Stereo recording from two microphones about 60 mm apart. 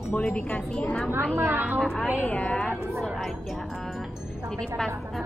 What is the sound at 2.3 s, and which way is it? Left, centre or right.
Speech, left.